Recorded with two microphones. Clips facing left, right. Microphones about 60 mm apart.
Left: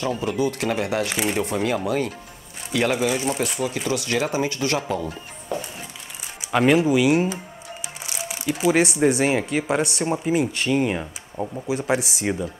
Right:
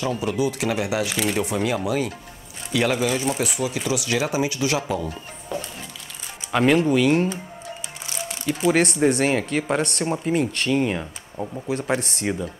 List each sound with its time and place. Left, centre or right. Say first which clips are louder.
0.0 s speech: even; centre
1.1 s speech: even; centre
1.4 s speech: even; centre